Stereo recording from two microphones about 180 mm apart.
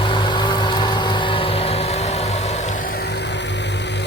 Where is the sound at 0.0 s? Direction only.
25° left (ahead or behind).